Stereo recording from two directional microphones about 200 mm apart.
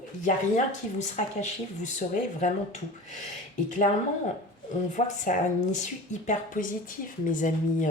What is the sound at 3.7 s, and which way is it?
Speech, 40° left (ahead or behind).